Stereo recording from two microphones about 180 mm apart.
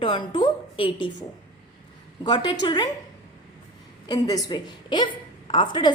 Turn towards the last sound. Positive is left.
turn(degrees=25)  # may be behind; listen again after turning